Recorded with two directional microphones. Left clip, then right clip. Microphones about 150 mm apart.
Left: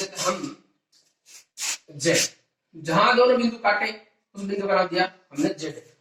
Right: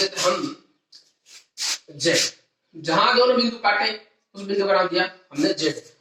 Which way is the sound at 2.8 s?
20° right (ahead or behind).